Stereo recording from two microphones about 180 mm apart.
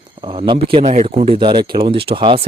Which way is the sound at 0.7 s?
40° right (ahead or behind).